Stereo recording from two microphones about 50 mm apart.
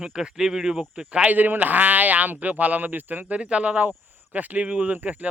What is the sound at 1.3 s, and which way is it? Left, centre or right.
Speech, right.